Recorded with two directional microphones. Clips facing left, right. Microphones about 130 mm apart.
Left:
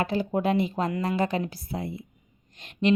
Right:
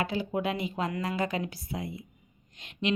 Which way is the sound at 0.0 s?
45° left (ahead or behind).